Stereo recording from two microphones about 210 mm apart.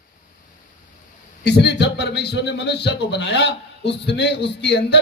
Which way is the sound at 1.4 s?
55° left (ahead or behind).